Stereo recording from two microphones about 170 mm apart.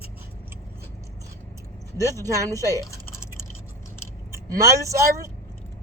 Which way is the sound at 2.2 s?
20° right (ahead or behind).